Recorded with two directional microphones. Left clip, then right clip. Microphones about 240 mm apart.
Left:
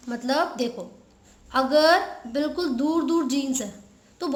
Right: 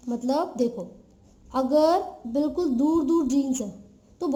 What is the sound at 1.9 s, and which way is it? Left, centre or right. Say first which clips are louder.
Speech: left 2 dB; centre.